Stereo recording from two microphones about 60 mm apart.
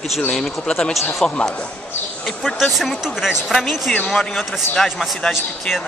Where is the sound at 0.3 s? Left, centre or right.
Centre.